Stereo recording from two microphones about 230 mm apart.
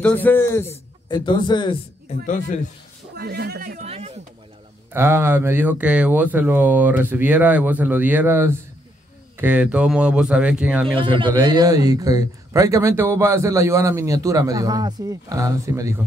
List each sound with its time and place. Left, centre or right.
0.0 s a man's voice: centre
3.2 s a man's voice: right
4.9 s speech: centre
11.0 s a man's voice: right